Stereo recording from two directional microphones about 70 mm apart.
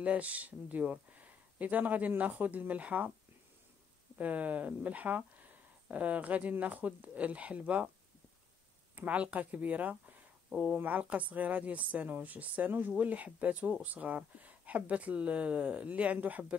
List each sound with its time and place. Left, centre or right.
0.0 s speech: right
4.2 s speech: right
8.9 s speech: centre